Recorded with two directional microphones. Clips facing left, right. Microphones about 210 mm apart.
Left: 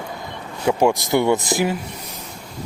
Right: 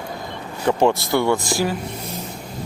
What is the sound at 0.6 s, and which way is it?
Speech, 10° left (ahead or behind).